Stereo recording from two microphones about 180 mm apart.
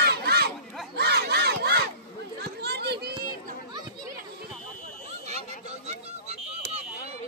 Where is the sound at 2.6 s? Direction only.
65° right (ahead or behind).